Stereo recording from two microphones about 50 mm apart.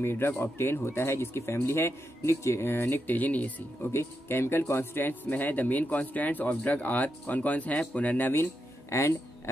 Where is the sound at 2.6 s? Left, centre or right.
Left.